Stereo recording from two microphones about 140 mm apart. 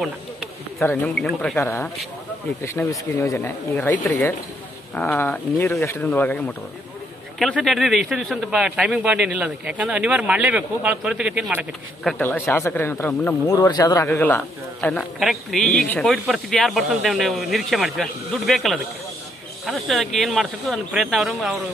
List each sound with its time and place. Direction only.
0.8 s speech: 5° left (ahead or behind)
7.3 s a man's voice: centre (ahead or behind)
12.2 s speech: 15° left (ahead or behind)
13.5 s speech: 25° left (ahead or behind)
14.0 s a man's voice: 15° left (ahead or behind); by 21.5 s 5° right (ahead or behind)